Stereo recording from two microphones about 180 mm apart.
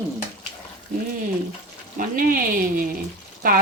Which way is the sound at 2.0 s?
50° right (ahead or behind).